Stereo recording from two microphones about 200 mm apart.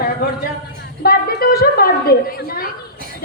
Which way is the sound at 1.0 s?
50° left (ahead or behind).